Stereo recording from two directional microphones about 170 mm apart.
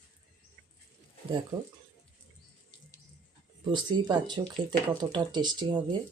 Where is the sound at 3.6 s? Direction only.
25° right (ahead or behind).